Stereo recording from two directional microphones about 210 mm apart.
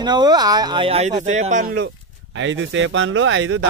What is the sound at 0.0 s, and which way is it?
Speech, 20° right (ahead or behind).